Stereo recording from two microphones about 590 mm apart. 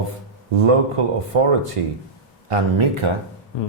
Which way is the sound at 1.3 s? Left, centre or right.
Right.